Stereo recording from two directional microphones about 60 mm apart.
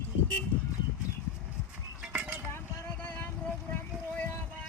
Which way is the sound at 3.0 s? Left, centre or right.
Left.